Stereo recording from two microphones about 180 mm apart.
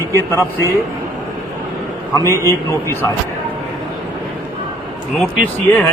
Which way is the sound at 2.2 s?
15° left (ahead or behind).